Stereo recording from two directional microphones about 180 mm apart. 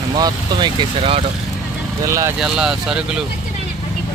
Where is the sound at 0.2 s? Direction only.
25° right (ahead or behind).